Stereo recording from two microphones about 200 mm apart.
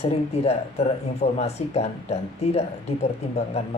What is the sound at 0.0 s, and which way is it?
A woman's voice, 30° left (ahead or behind).